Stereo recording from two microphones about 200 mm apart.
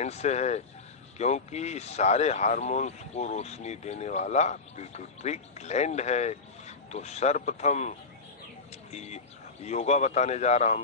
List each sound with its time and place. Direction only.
0.0 s speech: 35° left (ahead or behind)
8.9 s speech: 35° left (ahead or behind)